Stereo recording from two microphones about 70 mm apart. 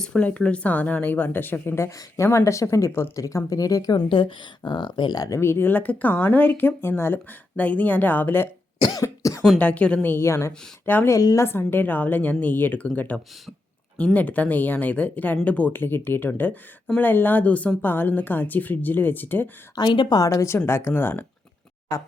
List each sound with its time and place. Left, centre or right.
0.0 s a woman's voice: centre; by 4.0 s left
4.6 s speech: left
5.4 s a woman's voice: left
7.5 s a woman's voice: left
8.9 s cough: left
9.6 s a woman's voice: centre
10.2 s speech: left
10.8 s a woman's voice: left
11.1 s speech: left
11.3 s a woman's voice: left
19.7 s a woman's voice: left
20.3 s speech: left